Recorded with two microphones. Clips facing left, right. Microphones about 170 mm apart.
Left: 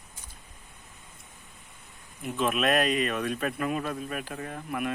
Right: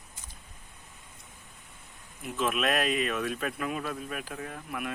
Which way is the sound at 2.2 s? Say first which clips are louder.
Left 2 dB; centre (ahead or behind).